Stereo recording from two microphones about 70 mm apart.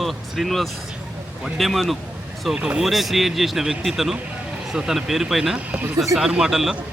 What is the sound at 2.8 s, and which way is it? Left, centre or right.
A man's voice, centre.